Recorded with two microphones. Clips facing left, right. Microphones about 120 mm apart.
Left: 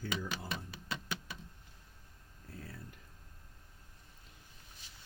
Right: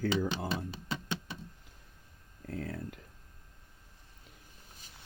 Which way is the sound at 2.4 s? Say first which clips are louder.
Right 11 dB; 65° right (ahead or behind).